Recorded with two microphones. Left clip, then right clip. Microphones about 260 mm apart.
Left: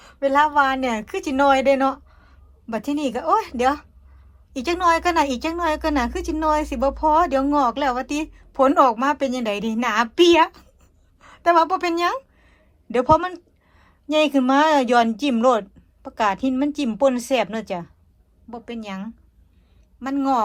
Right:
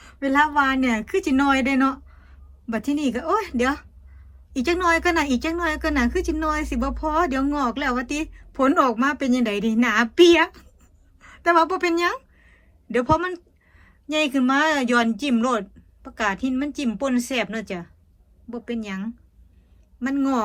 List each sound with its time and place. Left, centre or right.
0.0 s a woman's voice: centre